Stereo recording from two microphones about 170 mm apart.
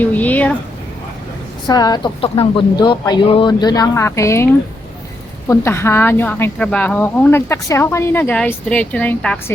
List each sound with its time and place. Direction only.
0.0 s a woman's voice: 10° left (ahead or behind)
1.6 s a woman's voice: 25° left (ahead or behind)
5.5 s a woman's voice: 15° left (ahead or behind)